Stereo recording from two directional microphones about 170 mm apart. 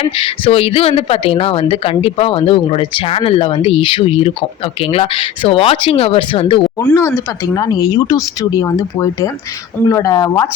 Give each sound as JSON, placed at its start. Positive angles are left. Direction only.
{"t": 0.0, "sound": "speech", "side_deg": 35}
{"t": 6.7, "sound": "speech", "side_deg": 20}